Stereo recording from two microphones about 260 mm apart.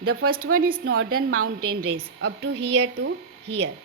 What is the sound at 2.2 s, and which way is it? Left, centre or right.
Speech, right.